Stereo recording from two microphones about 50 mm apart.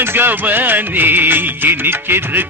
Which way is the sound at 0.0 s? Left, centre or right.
Right.